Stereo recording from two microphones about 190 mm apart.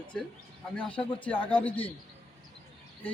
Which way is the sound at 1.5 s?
10° left (ahead or behind).